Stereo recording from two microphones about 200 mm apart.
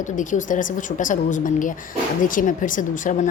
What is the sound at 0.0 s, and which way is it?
A woman's voice, 40° left (ahead or behind).